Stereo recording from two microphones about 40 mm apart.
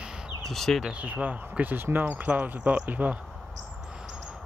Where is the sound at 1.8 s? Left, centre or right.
Right.